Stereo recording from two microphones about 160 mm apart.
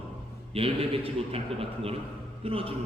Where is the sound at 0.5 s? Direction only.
35° right (ahead or behind).